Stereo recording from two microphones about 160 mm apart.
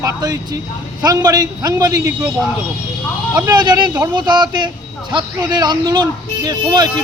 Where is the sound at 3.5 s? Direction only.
25° right (ahead or behind).